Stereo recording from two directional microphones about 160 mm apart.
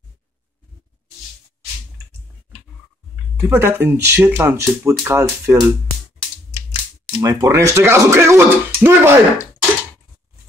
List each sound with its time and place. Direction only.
3.3 s speech: 15° right (ahead or behind)
7.2 s speech: 20° right (ahead or behind)